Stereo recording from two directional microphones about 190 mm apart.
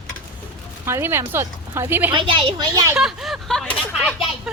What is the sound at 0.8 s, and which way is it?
A woman's voice, 15° right (ahead or behind).